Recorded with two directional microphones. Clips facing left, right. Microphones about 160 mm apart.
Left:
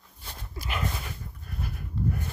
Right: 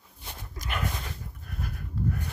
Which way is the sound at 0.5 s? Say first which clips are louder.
Left 1 dB; 5° left (ahead or behind).